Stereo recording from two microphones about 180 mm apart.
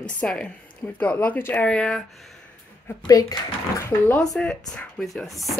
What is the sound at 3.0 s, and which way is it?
Speech, 20° left (ahead or behind).